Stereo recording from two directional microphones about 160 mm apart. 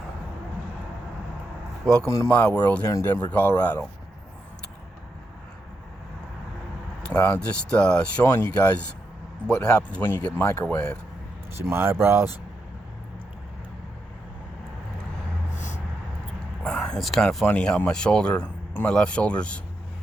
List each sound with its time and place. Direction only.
2.0 s speech: 15° left (ahead or behind)
7.0 s speech: 10° left (ahead or behind)
11.7 s speech: 15° right (ahead or behind)
15.5 s a sound: 45° left (ahead or behind)
16.6 s speech: 5° left (ahead or behind)